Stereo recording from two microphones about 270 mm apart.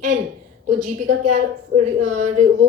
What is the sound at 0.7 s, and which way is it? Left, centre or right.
A woman's voice, right.